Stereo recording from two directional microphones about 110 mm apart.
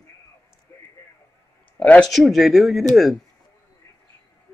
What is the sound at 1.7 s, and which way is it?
Speech, 15° left (ahead or behind).